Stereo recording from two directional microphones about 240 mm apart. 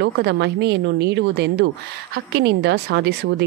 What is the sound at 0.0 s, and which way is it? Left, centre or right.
Speech, right.